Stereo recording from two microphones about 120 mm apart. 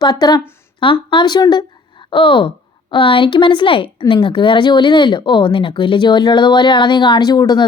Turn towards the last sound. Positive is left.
turn(degrees=35)  # may be behind; listen again after turning